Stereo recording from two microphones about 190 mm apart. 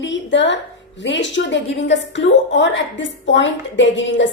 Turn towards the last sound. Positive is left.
turn(degrees=75)  # may be behind; listen again after turning